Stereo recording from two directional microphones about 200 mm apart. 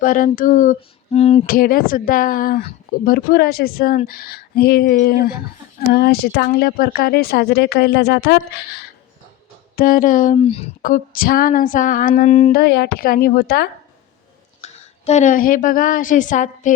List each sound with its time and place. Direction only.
0.0 s female singing: 45° left (ahead or behind)
1.5 s speech: 45° left (ahead or behind)
9.7 s female singing: 45° left (ahead or behind)
10.8 s speech: 45° left (ahead or behind)
14.6 s a woman's voice: 35° left (ahead or behind)